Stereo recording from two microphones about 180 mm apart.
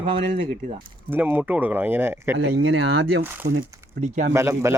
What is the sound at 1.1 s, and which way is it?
Speech, 10° right (ahead or behind).